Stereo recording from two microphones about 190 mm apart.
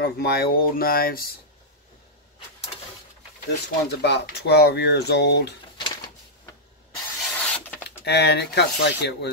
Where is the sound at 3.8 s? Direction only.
60° left (ahead or behind).